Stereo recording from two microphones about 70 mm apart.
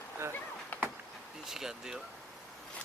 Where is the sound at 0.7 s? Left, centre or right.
Left.